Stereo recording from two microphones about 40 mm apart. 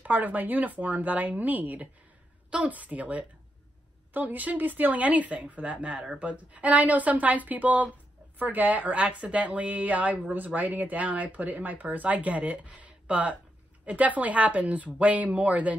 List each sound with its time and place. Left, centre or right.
0.0 s speech: right